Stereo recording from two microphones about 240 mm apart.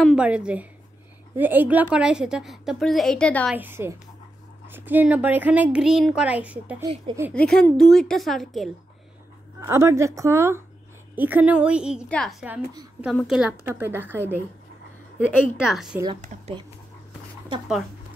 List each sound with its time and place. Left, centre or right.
0.0 s a woman's voice: centre
3.5 s a woman's voice: centre
7.3 s a woman's voice: centre
9.6 s a woman's voice: centre
16.2 s speech: right